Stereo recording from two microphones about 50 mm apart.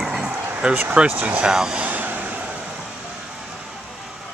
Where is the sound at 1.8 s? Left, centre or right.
Right.